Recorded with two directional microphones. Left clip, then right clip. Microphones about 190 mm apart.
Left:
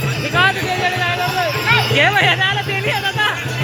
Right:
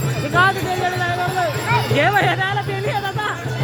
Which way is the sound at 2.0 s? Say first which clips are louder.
Left 1 dB; 60° right (ahead or behind).